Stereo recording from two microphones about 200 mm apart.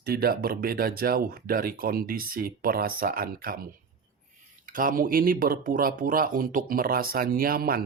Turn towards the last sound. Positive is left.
turn(degrees=-50)  # may be behind; listen again after turning